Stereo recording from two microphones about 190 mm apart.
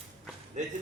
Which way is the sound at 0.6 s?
40° right (ahead or behind).